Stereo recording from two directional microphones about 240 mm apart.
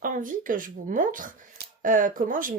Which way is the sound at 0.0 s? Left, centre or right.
Right.